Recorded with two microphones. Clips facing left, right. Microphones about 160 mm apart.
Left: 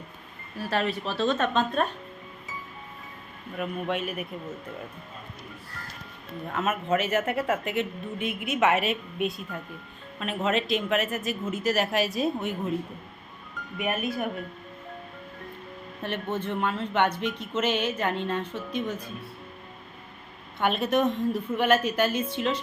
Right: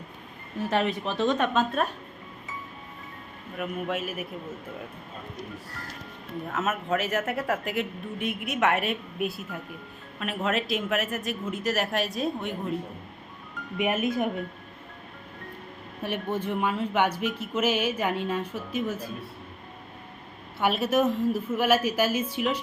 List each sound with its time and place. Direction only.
0.6 s speech: 20° right (ahead or behind)
3.6 s speech: centre (ahead or behind)
6.5 s speech: centre (ahead or behind)
13.7 s speech: 20° right (ahead or behind)
16.0 s speech: 10° right (ahead or behind)
20.6 s speech: 5° right (ahead or behind)